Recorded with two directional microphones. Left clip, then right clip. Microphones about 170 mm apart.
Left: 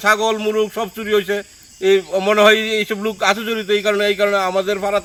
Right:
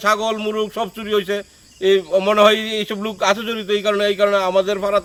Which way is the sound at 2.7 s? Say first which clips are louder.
Left 4 dB; 5° right (ahead or behind).